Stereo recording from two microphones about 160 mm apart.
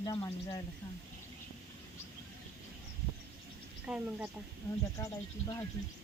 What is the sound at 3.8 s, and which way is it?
Speech, 10° right (ahead or behind).